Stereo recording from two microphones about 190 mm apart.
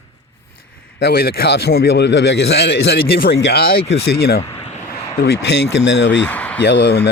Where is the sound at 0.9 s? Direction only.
55° left (ahead or behind).